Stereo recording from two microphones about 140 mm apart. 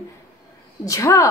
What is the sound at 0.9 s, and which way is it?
Speech, 20° left (ahead or behind).